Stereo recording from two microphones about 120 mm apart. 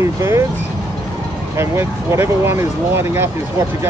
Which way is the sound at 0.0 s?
25° right (ahead or behind).